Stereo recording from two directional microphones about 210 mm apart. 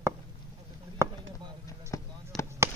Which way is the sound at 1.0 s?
10° right (ahead or behind).